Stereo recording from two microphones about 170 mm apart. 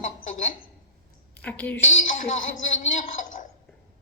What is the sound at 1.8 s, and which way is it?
A woman's voice, 50° left (ahead or behind).